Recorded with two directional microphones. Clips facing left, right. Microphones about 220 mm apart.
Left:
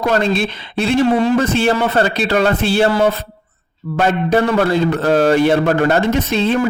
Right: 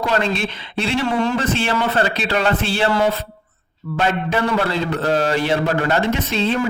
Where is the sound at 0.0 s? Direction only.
40° left (ahead or behind).